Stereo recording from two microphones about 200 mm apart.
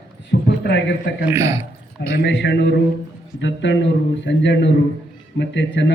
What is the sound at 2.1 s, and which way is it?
A man's voice, 60° left (ahead or behind).